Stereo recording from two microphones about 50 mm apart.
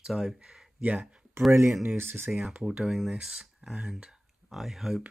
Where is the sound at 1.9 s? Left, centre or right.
Right.